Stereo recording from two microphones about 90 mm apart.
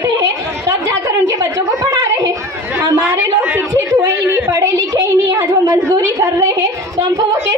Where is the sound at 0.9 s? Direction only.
45° right (ahead or behind).